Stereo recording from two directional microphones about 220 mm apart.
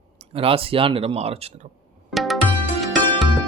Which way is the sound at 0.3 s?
25° right (ahead or behind).